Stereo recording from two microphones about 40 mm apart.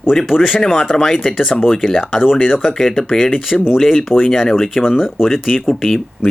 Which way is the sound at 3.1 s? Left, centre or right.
Centre.